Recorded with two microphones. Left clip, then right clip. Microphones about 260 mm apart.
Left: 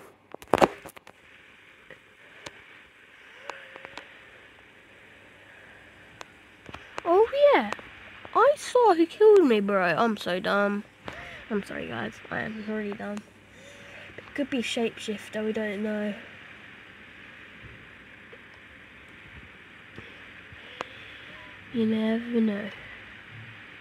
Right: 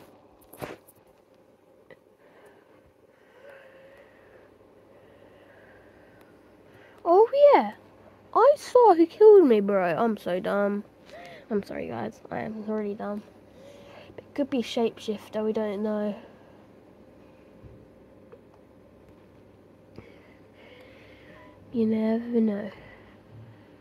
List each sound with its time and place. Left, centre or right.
7.1 s a sound: left
8.4 s speech: centre
21.8 s speech: centre